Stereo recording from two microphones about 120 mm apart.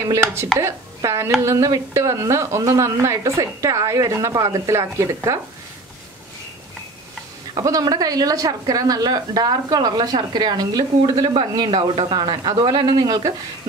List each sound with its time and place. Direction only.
0.1 s speech: 20° right (ahead or behind)
7.6 s a woman's voice: 30° right (ahead or behind)